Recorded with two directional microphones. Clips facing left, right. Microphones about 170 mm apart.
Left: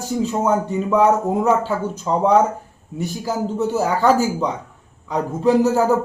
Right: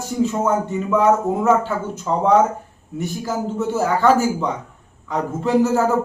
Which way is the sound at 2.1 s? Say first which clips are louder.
Even; 15° left (ahead or behind).